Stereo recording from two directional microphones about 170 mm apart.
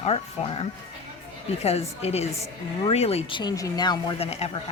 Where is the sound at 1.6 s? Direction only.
40° left (ahead or behind).